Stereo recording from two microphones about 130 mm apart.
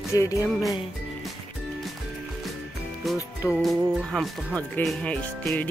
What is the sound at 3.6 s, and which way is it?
Speech, centre (ahead or behind).